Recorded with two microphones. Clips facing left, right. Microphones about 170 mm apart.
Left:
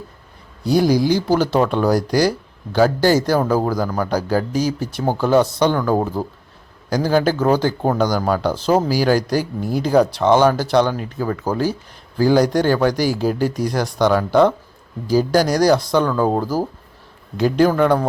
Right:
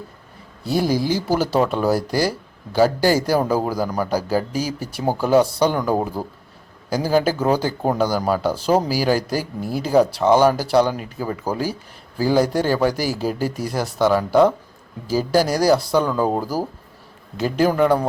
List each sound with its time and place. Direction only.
0.6 s a man's voice: centre (ahead or behind)